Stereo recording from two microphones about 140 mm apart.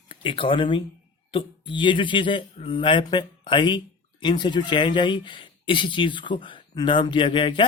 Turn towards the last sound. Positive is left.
turn(degrees=35)  # may be behind; listen again after turning